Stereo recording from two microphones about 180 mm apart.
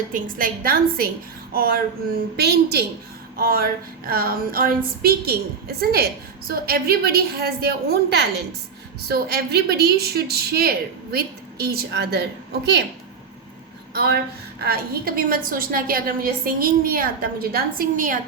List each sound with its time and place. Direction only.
0.1 s a woman's voice: 50° right (ahead or behind); by 12.8 s 65° right (ahead or behind)
14.6 s a woman's voice: 55° right (ahead or behind)